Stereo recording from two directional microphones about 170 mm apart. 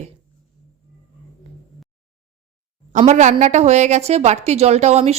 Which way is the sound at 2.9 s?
45° right (ahead or behind).